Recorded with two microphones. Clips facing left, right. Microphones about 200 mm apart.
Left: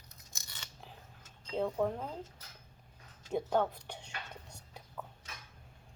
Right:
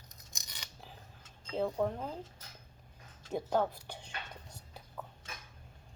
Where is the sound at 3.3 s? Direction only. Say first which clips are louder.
Left 1 dB; centre (ahead or behind).